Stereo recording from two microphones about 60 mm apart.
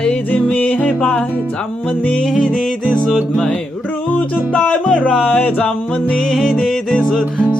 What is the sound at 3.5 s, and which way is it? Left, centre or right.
Music, left.